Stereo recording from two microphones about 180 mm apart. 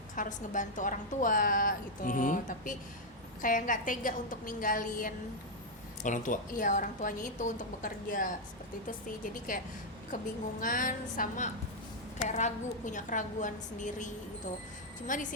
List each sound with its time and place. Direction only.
0.2 s a woman's voice: 45° left (ahead or behind)
10.6 s a woman's voice: 50° left (ahead or behind)